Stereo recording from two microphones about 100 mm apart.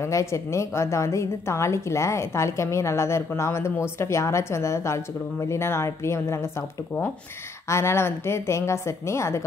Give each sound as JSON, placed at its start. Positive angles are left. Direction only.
{"t": 0.0, "sound": "a woman's voice", "side_deg": 30}
{"t": 7.6, "sound": "a woman's voice", "side_deg": 25}